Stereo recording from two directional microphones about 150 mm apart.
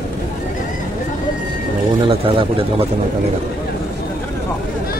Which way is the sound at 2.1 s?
40° right (ahead or behind).